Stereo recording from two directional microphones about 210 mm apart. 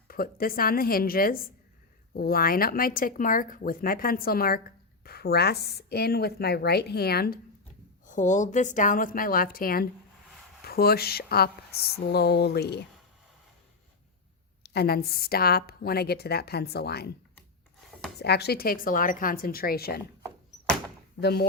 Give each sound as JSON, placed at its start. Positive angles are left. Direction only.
{"t": 0.1, "sound": "speech", "side_deg": 45}
{"t": 8.0, "sound": "a woman's voice", "side_deg": 35}
{"t": 14.7, "sound": "speech", "side_deg": 50}
{"t": 18.2, "sound": "speech", "side_deg": 50}
{"t": 21.2, "sound": "speech", "side_deg": 50}